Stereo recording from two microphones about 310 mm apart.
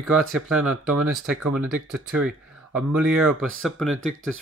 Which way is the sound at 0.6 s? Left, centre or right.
Right.